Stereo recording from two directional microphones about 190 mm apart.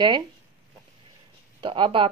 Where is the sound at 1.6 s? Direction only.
25° right (ahead or behind).